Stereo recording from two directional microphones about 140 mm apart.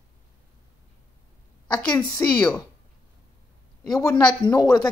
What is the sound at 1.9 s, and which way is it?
Speech, 20° left (ahead or behind).